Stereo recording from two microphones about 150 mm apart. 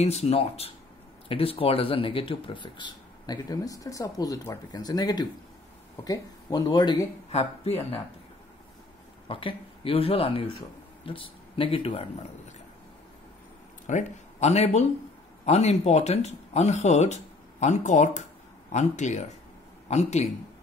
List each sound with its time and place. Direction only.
0.0 s speech: 45° left (ahead or behind); by 7.1 s 25° left (ahead or behind)
7.2 s speech: 45° left (ahead or behind)
9.3 s speech: 35° left (ahead or behind)
13.8 s speech: 50° left (ahead or behind)